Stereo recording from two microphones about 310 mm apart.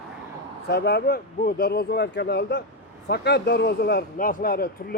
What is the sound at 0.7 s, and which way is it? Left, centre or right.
Speech, left.